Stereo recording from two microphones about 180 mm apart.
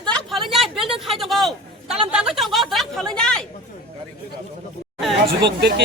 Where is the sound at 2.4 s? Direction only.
Centre (ahead or behind).